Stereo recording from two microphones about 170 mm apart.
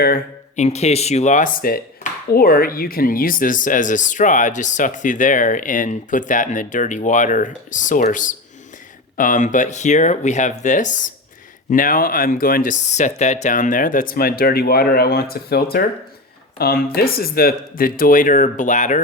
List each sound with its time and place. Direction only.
0.5 s speech: 40° left (ahead or behind)